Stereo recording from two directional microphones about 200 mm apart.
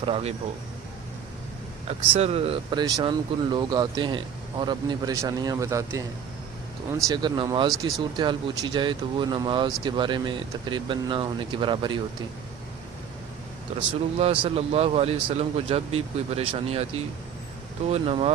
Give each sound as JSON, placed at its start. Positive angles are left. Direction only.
{"t": 0.0, "sound": "speech", "side_deg": -30}
{"t": 1.9, "sound": "speech", "side_deg": -30}
{"t": 7.1, "sound": "speech", "side_deg": -20}
{"t": 13.7, "sound": "speech", "side_deg": -30}
{"t": 17.8, "sound": "speech", "side_deg": -30}